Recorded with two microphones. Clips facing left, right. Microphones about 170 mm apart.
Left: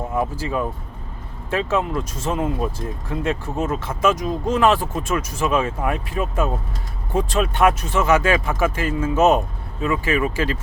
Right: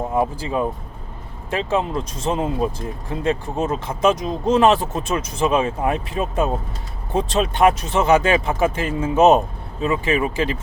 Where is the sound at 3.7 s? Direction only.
20° right (ahead or behind).